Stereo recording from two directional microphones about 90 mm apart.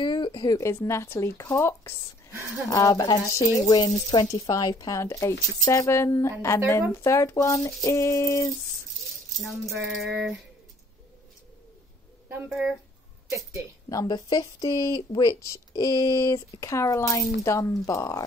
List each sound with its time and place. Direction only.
0.0 s a sound: 55° left (ahead or behind)
0.4 s speech: 35° left (ahead or behind)
8.9 s speech: centre (ahead or behind)
12.4 s speech: 10° right (ahead or behind)
13.8 s speech: 40° left (ahead or behind)